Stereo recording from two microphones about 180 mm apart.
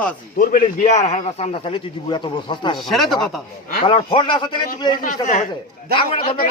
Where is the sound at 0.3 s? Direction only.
45° left (ahead or behind); by 2.7 s 25° left (ahead or behind).